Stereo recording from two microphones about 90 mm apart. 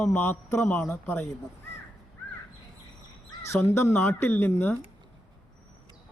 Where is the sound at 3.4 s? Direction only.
30° left (ahead or behind).